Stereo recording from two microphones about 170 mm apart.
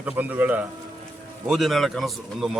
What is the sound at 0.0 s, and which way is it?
Speech, 10° right (ahead or behind).